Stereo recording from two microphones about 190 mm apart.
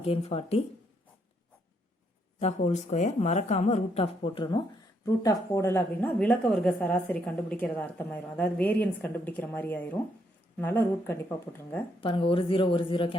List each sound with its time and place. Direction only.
0.0 s speech: 30° left (ahead or behind)
2.4 s a woman's voice: 35° left (ahead or behind); by 11.2 s 10° left (ahead or behind)
11.9 s speech: 30° left (ahead or behind)